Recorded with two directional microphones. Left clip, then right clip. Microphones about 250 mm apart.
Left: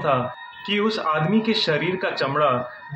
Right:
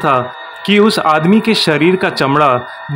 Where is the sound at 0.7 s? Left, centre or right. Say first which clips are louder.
Right 11 dB; right.